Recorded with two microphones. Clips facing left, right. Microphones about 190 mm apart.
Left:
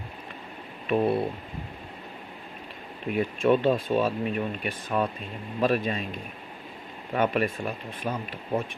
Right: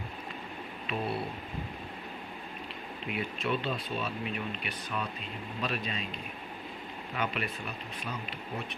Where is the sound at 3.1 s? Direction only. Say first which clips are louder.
Left 10 dB; 50° left (ahead or behind).